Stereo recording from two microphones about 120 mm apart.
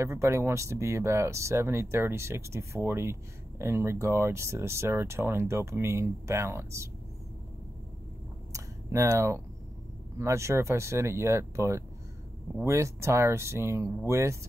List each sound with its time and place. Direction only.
0.0 s speech: 25° right (ahead or behind)
8.5 s a sound: 25° right (ahead or behind)
10.1 s speech: 25° right (ahead or behind)